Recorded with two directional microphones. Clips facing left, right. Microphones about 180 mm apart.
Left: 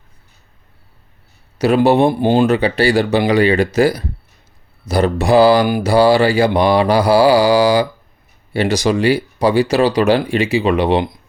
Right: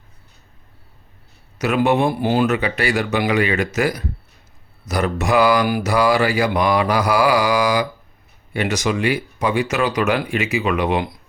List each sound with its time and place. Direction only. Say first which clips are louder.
1.5 s mantra: left 5 dB; 30° left (ahead or behind)